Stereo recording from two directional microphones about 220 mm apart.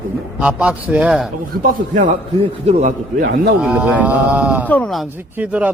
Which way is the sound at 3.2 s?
45° right (ahead or behind).